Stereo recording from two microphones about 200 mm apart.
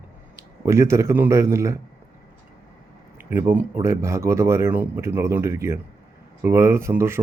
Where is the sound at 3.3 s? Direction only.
10° right (ahead or behind).